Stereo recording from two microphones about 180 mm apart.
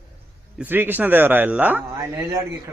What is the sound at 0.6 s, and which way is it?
A man's voice, 10° right (ahead or behind).